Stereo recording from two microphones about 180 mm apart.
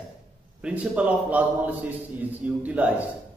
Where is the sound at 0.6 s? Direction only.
5° right (ahead or behind).